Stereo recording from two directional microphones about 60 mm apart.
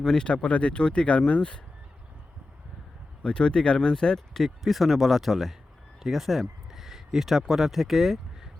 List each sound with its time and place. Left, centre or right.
0.0 s speech: centre
3.2 s speech: centre